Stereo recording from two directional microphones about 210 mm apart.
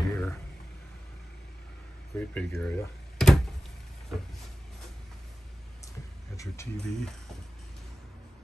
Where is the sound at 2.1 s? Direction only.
5° left (ahead or behind).